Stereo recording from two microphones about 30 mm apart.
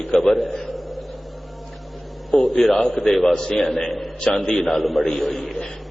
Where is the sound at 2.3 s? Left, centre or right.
Centre.